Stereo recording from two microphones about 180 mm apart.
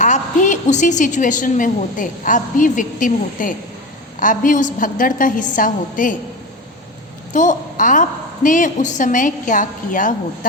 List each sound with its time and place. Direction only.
0.0 s a woman's voice: 45° left (ahead or behind)
7.3 s a woman's voice: 45° left (ahead or behind)